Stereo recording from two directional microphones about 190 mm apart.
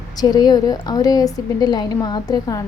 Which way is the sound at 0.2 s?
20° left (ahead or behind).